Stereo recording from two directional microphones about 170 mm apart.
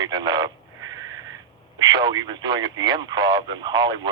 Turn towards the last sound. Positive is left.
turn(degrees=-25)  # may be behind; listen again after turning